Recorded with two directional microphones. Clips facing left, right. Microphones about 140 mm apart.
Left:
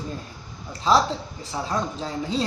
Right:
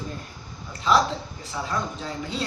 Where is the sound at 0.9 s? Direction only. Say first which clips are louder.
Left 1 dB; 35° left (ahead or behind).